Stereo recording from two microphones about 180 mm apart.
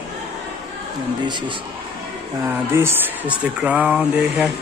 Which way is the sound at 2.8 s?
10° right (ahead or behind).